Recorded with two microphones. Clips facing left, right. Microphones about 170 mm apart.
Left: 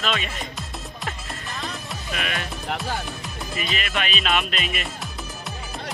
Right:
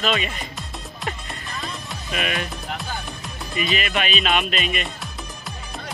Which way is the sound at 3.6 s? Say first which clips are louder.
Right 4 dB; 5° right (ahead or behind).